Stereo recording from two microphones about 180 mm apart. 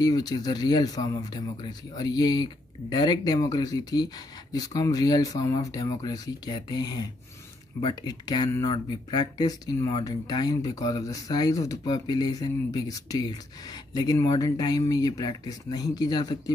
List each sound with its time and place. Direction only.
0.0 s speech: 20° left (ahead or behind)